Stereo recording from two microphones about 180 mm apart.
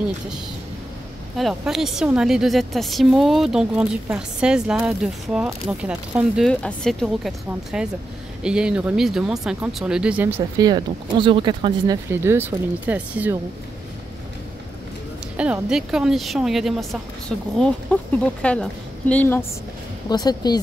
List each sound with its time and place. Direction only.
1.3 s speech: centre (ahead or behind)
10.7 s speech: 25° right (ahead or behind)
12.1 s speech: 10° right (ahead or behind)
15.3 s a woman's voice: 5° right (ahead or behind); by 19.4 s 10° left (ahead or behind)
20.1 s speech: 20° left (ahead or behind)